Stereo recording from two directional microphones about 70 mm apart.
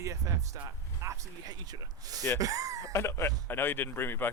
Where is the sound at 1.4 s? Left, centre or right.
Right.